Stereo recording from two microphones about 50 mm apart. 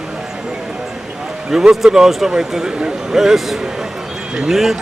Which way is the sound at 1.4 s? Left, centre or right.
Centre.